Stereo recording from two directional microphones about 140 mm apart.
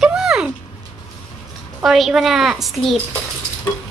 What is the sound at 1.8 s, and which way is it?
Speech, centre (ahead or behind).